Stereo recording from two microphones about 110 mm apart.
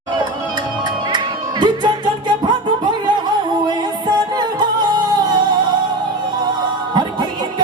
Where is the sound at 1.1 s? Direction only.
40° right (ahead or behind).